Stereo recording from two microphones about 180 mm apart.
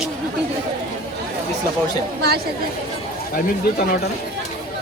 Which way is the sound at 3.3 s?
55° left (ahead or behind).